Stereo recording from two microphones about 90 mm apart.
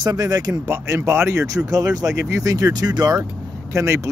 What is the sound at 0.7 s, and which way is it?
Speech, 30° right (ahead or behind).